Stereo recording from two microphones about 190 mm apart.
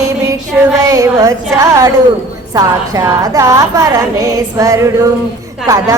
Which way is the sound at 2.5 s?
20° right (ahead or behind).